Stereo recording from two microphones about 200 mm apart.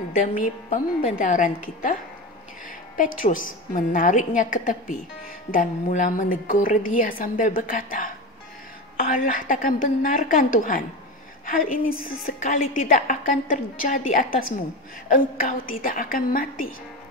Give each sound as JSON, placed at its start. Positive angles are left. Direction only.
{"t": 0.3, "sound": "a woman's voice", "side_deg": 30}
{"t": 3.0, "sound": "a woman's voice", "side_deg": 40}